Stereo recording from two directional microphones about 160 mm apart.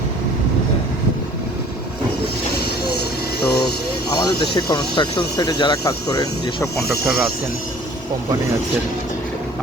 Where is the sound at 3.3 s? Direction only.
80° left.